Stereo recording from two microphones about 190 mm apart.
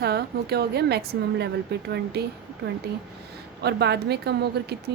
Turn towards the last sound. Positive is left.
turn(degrees=-60)  # may be behind; listen again after turning